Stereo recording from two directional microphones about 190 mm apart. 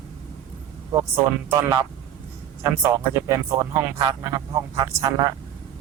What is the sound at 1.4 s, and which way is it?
Speech, 20° right (ahead or behind).